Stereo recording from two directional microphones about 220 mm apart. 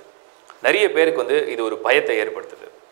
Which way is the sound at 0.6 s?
15° right (ahead or behind).